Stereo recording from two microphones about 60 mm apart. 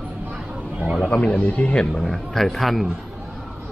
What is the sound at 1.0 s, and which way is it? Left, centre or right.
A man's voice, left.